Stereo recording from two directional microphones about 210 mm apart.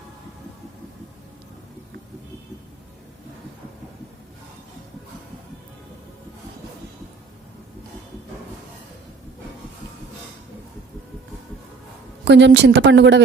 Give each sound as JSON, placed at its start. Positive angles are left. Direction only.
{"t": 12.2, "sound": "a woman's voice", "side_deg": -55}